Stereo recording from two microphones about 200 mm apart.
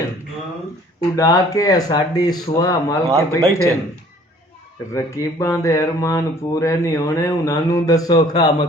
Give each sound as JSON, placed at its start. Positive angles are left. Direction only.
{"t": 1.1, "sound": "speech", "side_deg": 15}
{"t": 3.1, "sound": "speech", "side_deg": -15}
{"t": 4.9, "sound": "speech", "side_deg": 15}